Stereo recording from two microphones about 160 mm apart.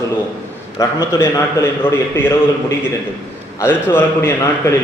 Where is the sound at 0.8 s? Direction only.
20° left (ahead or behind).